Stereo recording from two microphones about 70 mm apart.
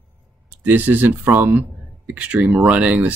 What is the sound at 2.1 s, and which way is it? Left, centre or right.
Speech, centre.